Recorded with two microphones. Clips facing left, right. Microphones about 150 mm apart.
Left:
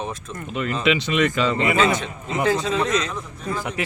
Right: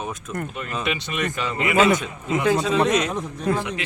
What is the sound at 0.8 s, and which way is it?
Speech, 90° left.